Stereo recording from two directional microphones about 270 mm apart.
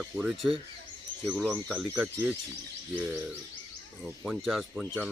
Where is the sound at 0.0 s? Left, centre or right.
Centre.